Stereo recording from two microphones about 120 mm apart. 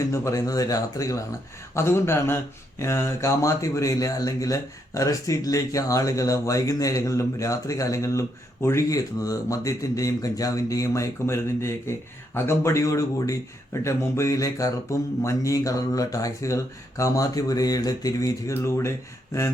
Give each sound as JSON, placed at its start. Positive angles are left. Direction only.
{"t": 0.0, "sound": "speech", "side_deg": 25}